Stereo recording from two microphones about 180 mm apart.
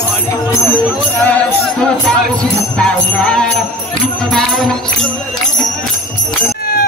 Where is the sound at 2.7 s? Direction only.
5° left (ahead or behind).